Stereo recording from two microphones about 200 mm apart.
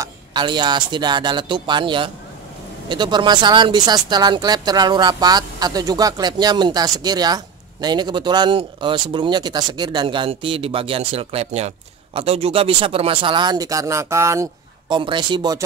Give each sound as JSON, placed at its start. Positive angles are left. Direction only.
{"t": 0.0, "sound": "speech", "side_deg": -20}